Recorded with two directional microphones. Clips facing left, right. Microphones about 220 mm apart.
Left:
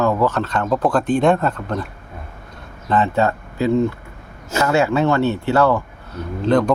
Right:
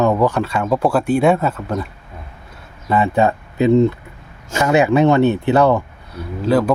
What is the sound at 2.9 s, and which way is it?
Speech, 15° right (ahead or behind).